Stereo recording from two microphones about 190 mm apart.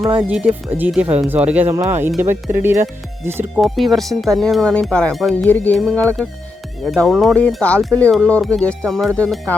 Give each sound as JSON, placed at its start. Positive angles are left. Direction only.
{"t": 0.0, "sound": "speech", "side_deg": -25}
{"t": 0.3, "sound": "speech", "side_deg": -5}
{"t": 3.6, "sound": "speech", "side_deg": 0}